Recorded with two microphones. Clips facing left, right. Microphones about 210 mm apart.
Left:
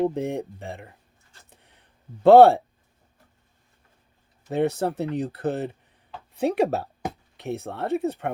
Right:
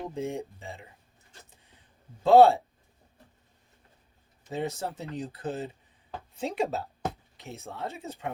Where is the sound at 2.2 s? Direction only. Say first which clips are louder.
Left 5 dB; 65° left (ahead or behind).